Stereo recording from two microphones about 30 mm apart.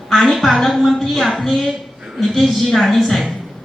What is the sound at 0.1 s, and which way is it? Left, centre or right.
A woman's voice, centre.